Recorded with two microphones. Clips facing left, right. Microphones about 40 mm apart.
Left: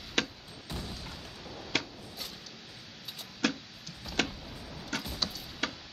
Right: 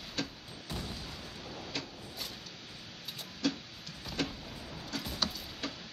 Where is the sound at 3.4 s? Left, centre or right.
Left.